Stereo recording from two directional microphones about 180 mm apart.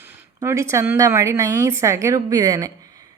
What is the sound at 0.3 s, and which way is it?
A woman's voice, 15° right (ahead or behind).